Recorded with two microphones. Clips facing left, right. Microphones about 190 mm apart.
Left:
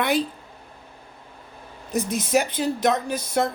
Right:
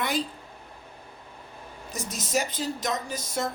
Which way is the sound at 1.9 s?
60° left (ahead or behind).